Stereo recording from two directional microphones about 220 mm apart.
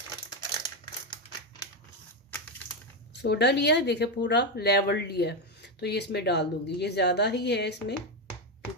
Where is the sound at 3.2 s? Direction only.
50° left (ahead or behind).